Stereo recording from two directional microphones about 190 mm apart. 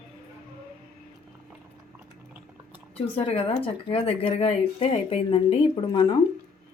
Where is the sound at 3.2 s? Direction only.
30° left (ahead or behind).